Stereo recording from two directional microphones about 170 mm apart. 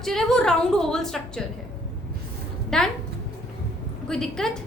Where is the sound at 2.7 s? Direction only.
5° left (ahead or behind).